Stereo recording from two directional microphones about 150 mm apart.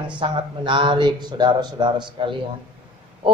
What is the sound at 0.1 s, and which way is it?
A man's voice, 35° right (ahead or behind).